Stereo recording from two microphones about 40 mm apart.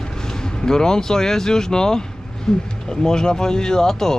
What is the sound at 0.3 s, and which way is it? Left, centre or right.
Speech, centre.